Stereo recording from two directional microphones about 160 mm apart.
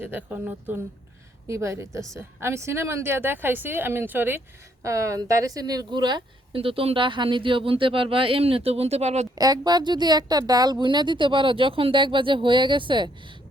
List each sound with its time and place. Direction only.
0.0 s a woman's voice: 10° right (ahead or behind); by 9.2 s 45° right (ahead or behind)
9.4 s a woman's voice: 25° right (ahead or behind)